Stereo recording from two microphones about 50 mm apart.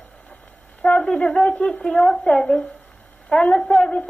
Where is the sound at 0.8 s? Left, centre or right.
Centre.